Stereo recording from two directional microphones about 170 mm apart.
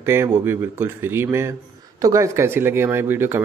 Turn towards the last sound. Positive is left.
turn(degrees=-15)  # may be behind; listen again after turning